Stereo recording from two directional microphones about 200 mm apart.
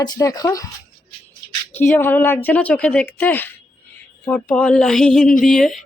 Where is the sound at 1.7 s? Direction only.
10° left (ahead or behind).